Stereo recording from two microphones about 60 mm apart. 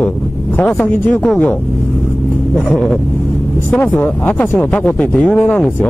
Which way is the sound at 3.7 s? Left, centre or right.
Left.